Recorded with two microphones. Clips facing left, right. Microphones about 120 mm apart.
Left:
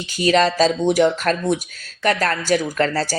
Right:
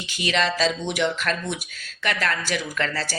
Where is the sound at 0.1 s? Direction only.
40° left (ahead or behind).